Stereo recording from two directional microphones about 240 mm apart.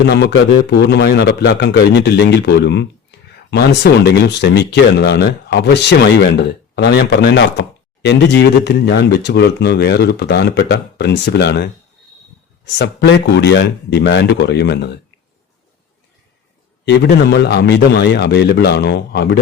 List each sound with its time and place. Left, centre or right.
0.1 s a man's voice: left
12.8 s a man's voice: left
16.8 s a man's voice: left